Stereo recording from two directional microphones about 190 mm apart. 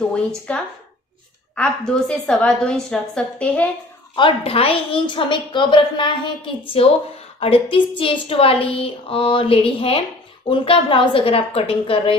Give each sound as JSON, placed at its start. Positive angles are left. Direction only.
{"t": 0.5, "sound": "a woman's voice", "side_deg": 5}
{"t": 4.1, "sound": "a woman's voice", "side_deg": 30}